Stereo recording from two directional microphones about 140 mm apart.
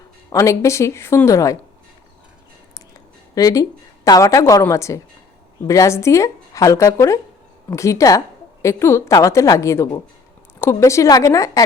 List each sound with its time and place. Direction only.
0.3 s a woman's voice: 20° left (ahead or behind)
3.3 s a woman's voice: 25° left (ahead or behind)